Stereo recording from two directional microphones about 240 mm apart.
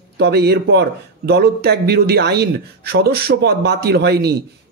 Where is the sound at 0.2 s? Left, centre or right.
Right.